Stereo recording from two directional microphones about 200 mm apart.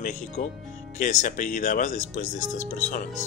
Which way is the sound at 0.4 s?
40° left (ahead or behind).